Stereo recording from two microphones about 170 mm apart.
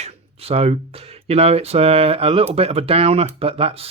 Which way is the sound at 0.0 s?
35° right (ahead or behind).